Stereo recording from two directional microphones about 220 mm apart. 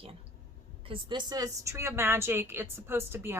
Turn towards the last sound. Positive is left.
turn(degrees=-10)  # may be behind; listen again after turning